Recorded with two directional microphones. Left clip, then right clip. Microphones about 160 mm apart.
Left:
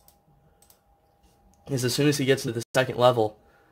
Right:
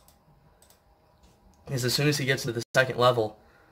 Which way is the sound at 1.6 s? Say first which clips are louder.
Left 2 dB; 50° left (ahead or behind).